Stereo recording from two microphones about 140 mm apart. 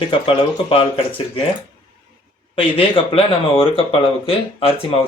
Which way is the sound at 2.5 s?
40° left (ahead or behind).